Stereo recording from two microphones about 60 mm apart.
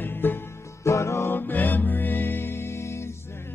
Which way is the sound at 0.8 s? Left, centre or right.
Left.